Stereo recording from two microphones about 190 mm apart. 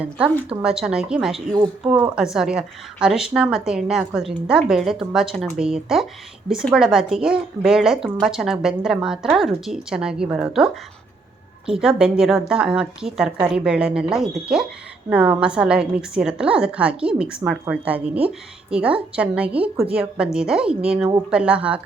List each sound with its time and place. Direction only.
0.6 s a woman's voice: 5° right (ahead or behind)
1.5 s speech: 25° right (ahead or behind)
1.9 s a woman's voice: 5° right (ahead or behind)